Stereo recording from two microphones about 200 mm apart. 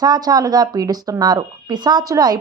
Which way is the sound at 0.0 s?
20° right (ahead or behind).